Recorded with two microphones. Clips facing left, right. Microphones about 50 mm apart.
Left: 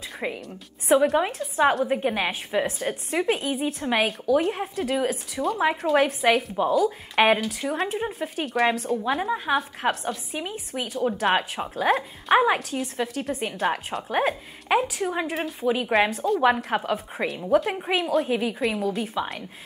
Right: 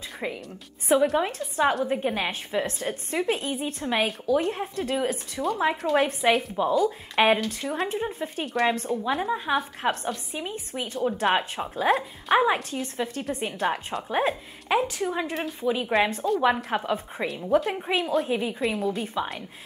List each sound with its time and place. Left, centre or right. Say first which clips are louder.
0.2 s a woman's voice: left 2 dB; centre
0.8 s a woman's voice: left 2 dB; centre
17.5 s a woman's voice: left 1 dB; centre